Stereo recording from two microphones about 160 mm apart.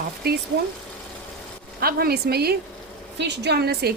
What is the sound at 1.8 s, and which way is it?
Speech, 70° right (ahead or behind).